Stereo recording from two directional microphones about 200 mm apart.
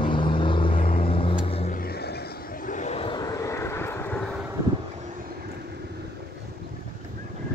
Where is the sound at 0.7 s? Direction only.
45° left (ahead or behind).